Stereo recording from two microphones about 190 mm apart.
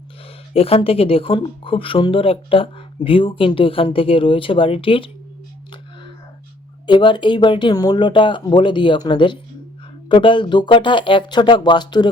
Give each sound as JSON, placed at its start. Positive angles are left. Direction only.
{"t": 0.5, "sound": "a woman's voice", "side_deg": 30}
{"t": 6.8, "sound": "a woman's voice", "side_deg": 25}